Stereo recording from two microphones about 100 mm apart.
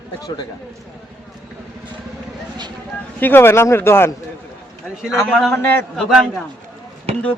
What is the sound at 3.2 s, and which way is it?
Speech, 20° left (ahead or behind).